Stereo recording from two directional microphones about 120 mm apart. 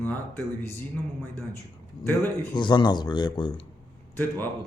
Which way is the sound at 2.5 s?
40° left (ahead or behind).